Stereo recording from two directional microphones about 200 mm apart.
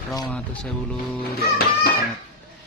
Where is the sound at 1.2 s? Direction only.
50° left (ahead or behind).